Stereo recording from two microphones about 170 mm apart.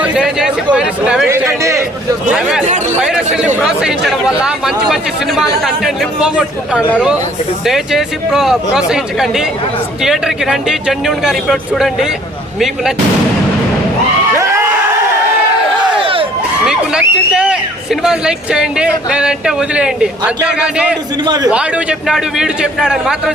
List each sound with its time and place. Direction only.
0.0 s chatter: 5° right (ahead or behind)
1.3 s a man's voice: 15° right (ahead or behind)
2.3 s speech: 5° right (ahead or behind)
2.6 s speech: 45° right (ahead or behind)
3.0 s speech: 5° right (ahead or behind)
14.3 s a sound: 15° right (ahead or behind)
16.0 s crowd: 30° right (ahead or behind)
16.6 s a sound: 5° right (ahead or behind)
18.0 s speech: 5° right (ahead or behind)
21.2 s speech: 25° right (ahead or behind)
21.5 s speech: 5° right (ahead or behind)